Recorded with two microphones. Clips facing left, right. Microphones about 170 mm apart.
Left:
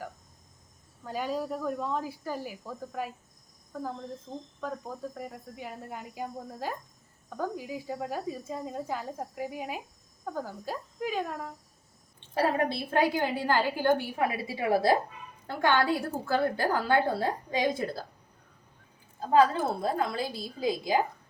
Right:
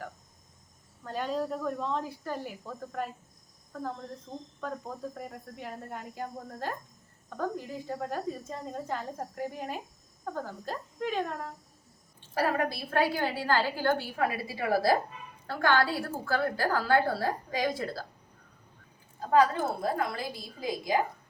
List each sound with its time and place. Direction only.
1.0 s speech: 5° left (ahead or behind)
4.3 s speech: 10° left (ahead or behind)
12.3 s a woman's voice: 25° left (ahead or behind)
19.8 s a woman's voice: 25° left (ahead or behind)